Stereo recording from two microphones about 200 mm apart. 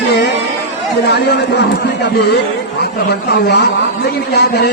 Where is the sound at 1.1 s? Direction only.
60° left (ahead or behind).